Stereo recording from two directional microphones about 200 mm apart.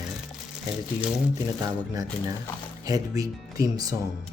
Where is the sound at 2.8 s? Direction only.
15° right (ahead or behind).